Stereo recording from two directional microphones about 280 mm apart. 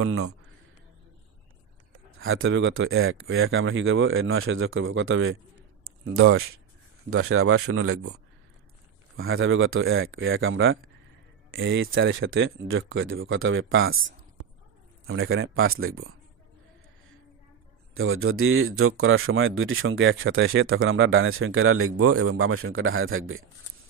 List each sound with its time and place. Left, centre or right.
0.0 s speech: right
2.0 s speech: right
15.0 s speech: right
17.9 s speech: right